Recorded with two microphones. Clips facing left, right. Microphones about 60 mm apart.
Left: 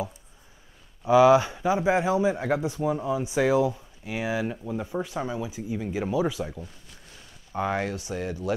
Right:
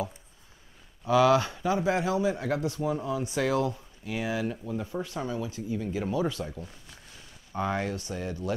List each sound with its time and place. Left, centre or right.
1.0 s speech: centre